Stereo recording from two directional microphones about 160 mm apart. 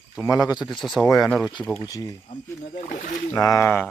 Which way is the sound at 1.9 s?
20° left (ahead or behind).